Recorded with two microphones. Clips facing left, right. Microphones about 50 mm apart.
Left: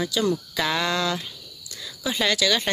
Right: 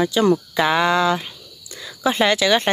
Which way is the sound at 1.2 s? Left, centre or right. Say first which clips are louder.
Right 3 dB; right.